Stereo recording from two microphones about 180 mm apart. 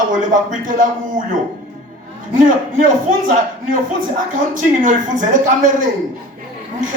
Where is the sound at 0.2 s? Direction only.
45° right (ahead or behind).